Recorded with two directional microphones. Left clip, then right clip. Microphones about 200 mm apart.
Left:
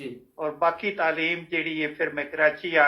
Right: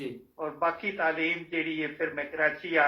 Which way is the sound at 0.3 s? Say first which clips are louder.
Left 5 dB; 45° left (ahead or behind).